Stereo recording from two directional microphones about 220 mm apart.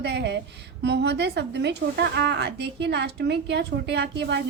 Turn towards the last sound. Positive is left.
turn(degrees=-50)  # may be behind; listen again after turning